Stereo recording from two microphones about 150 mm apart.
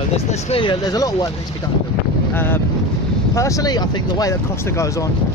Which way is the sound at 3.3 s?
20° left (ahead or behind).